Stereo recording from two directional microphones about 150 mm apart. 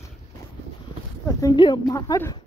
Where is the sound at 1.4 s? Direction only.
25° left (ahead or behind).